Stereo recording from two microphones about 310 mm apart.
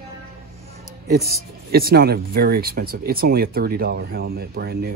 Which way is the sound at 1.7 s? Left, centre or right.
Right.